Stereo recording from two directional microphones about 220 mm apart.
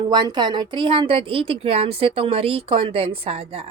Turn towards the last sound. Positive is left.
turn(degrees=-25)  # may be behind; listen again after turning